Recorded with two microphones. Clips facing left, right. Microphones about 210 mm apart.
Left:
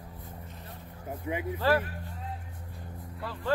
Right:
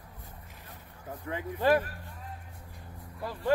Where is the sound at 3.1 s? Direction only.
15° right (ahead or behind).